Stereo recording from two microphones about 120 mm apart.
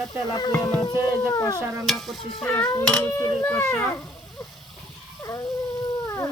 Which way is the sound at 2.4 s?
15° left (ahead or behind).